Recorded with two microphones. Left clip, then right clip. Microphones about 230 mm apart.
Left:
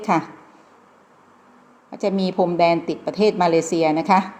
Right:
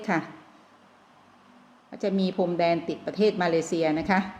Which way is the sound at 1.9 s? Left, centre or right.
Centre.